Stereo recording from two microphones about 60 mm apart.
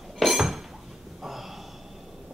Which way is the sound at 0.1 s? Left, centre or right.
Centre.